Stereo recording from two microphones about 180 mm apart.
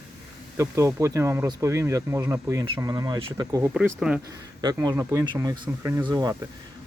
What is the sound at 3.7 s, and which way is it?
Speech, 5° right (ahead or behind).